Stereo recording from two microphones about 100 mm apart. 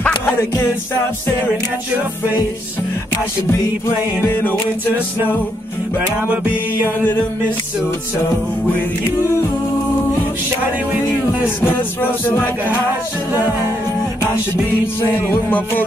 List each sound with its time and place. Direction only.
0.0 s music: 20° left (ahead or behind)
4.4 s music: 20° left (ahead or behind)
11.4 s music: 20° left (ahead or behind)
15.0 s music: 20° left (ahead or behind)